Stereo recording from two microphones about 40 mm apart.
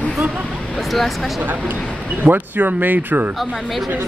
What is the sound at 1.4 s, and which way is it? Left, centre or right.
Speech, right.